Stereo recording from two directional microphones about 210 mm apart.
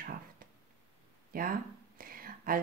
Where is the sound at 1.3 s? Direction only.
45° right (ahead or behind).